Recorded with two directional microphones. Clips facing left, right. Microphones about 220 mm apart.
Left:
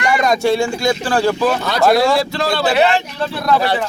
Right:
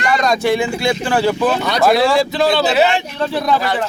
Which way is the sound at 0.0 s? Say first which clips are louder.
Left 1 dB; 20° left (ahead or behind).